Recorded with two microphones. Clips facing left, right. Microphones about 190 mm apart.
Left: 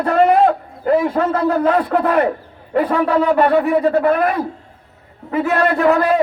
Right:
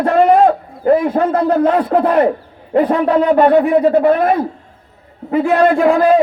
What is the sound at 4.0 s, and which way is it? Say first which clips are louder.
A man's voice: right 3 dB; 25° right (ahead or behind).